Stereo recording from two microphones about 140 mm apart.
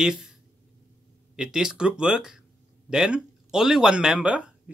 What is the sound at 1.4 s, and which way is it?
Speech, 5° right (ahead or behind).